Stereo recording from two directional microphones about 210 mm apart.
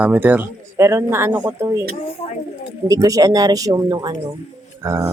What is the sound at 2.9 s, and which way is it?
Speech, 15° right (ahead or behind).